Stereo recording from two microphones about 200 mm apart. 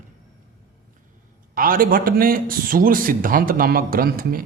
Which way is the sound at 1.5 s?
45° right (ahead or behind).